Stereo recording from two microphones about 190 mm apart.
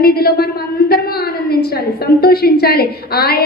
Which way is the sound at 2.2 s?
55° left (ahead or behind).